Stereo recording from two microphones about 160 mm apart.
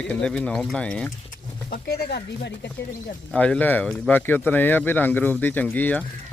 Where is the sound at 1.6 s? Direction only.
75° left (ahead or behind).